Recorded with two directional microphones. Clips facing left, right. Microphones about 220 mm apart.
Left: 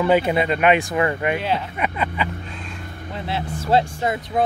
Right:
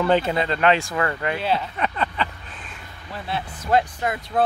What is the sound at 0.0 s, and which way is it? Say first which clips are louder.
Speech: left 2 dB; 10° left (ahead or behind).